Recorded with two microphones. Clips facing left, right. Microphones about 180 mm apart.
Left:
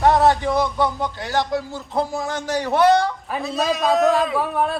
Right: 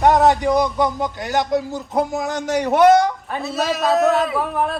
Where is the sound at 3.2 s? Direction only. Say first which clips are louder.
Even; centre (ahead or behind).